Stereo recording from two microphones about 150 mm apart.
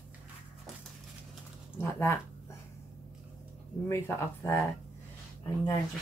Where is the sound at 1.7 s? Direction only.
15° left (ahead or behind).